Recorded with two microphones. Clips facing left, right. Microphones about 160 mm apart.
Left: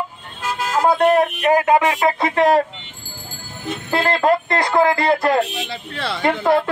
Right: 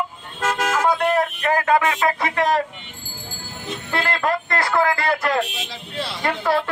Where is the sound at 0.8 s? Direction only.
25° left (ahead or behind).